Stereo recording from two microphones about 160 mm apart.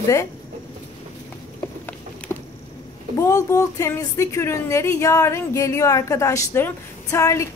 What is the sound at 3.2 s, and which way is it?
A woman's voice, 20° left (ahead or behind).